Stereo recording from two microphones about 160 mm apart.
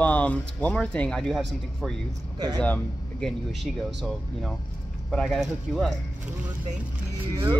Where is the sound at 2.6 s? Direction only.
5° left (ahead or behind).